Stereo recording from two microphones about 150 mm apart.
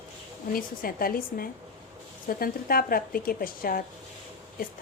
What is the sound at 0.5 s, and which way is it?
Speech, 75° left (ahead or behind).